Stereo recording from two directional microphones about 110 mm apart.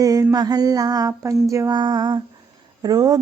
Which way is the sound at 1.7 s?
40° right (ahead or behind).